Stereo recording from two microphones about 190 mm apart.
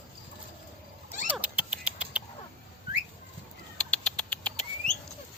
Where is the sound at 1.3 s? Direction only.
5° right (ahead or behind).